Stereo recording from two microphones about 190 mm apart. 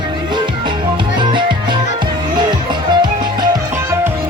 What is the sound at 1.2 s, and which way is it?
Music, 25° right (ahead or behind).